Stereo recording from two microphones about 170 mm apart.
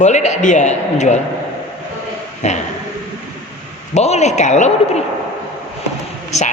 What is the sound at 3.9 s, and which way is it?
A man's voice, 40° left (ahead or behind).